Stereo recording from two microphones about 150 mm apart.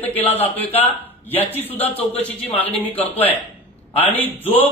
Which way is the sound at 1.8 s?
40° left (ahead or behind).